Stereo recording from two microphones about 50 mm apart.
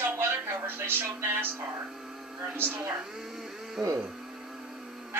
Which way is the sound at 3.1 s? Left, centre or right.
Centre.